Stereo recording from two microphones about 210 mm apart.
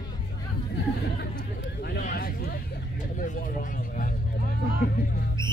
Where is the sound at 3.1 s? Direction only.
40° left (ahead or behind).